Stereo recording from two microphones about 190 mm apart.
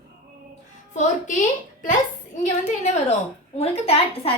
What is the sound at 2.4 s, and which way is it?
A woman's voice, 40° left (ahead or behind).